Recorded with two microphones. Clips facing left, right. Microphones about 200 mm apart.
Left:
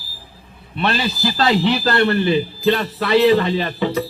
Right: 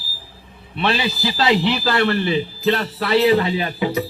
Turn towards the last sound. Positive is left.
turn(degrees=-10)  # may be behind; listen again after turning